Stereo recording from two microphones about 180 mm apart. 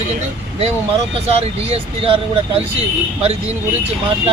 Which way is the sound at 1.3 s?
35° right (ahead or behind).